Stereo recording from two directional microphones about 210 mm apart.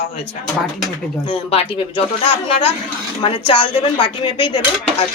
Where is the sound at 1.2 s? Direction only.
25° left (ahead or behind).